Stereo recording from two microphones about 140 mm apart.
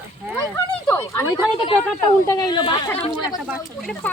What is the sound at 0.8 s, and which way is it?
Speech, 20° left (ahead or behind).